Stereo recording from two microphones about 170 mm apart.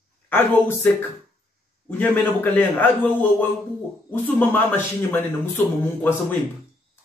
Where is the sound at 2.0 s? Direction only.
10° left (ahead or behind).